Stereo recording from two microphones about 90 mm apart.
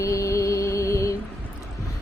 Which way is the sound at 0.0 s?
35° left (ahead or behind).